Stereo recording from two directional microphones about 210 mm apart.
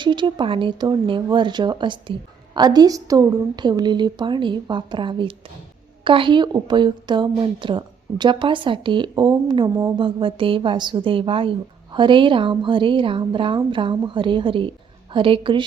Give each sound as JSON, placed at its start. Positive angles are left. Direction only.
{"t": 0.0, "sound": "a woman's voice", "side_deg": -20}